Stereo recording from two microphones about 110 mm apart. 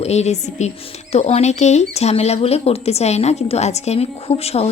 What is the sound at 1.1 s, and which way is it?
Speech, 75° left (ahead or behind).